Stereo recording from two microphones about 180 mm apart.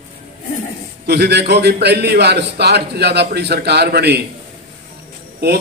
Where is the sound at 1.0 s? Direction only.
65° right (ahead or behind).